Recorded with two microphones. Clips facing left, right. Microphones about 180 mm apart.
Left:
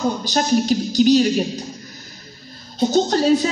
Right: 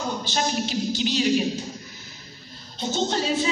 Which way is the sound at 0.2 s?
40° left (ahead or behind).